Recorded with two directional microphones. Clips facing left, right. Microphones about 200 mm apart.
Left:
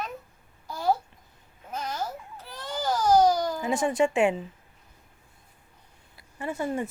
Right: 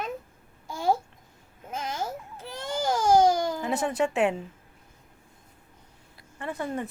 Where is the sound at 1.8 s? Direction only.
25° right (ahead or behind).